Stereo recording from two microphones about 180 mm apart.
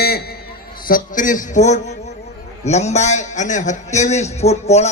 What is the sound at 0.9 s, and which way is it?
A man's voice, 50° left (ahead or behind).